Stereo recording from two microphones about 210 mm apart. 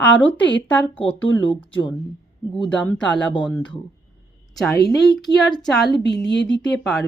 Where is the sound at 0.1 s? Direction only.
60° left (ahead or behind).